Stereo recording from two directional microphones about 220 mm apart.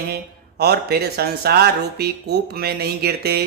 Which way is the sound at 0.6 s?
45° right (ahead or behind).